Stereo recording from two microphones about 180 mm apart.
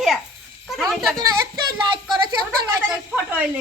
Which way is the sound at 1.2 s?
20° right (ahead or behind).